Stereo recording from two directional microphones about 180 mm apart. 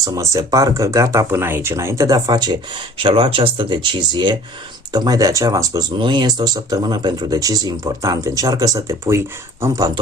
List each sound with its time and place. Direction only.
0.0 s speech: 20° right (ahead or behind)